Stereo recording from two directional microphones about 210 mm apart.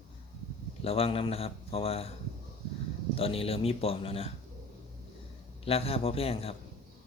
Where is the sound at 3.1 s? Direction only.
25° left (ahead or behind).